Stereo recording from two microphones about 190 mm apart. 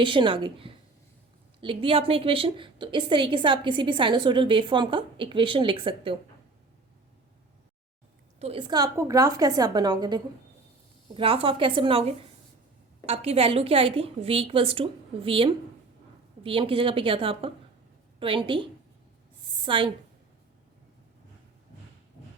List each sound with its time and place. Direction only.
0.0 s a woman's voice: 25° right (ahead or behind)
8.4 s a woman's voice: 30° right (ahead or behind)